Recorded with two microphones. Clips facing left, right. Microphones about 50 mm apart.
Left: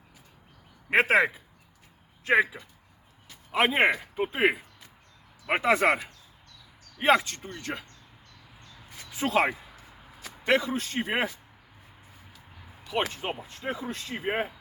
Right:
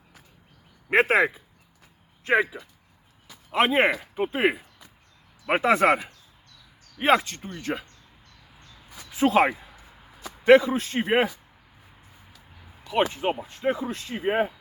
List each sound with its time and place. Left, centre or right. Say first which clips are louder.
0.9 s speech: right 2 dB; centre
5.6 s speech: right 3 dB; centre
9.0 s speech: right 5 dB; centre
13.1 s speech: right 7 dB; centre